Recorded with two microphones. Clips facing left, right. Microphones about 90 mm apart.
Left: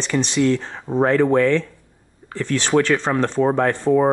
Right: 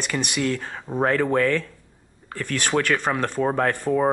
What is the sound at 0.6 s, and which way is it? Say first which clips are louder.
Speech: left 4 dB; 20° left (ahead or behind).